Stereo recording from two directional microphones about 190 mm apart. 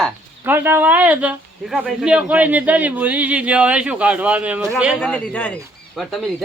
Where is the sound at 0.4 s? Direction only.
10° right (ahead or behind).